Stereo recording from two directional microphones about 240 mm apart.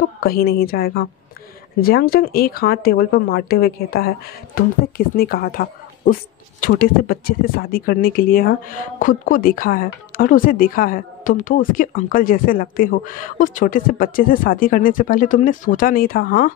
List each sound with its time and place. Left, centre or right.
0.2 s speech: left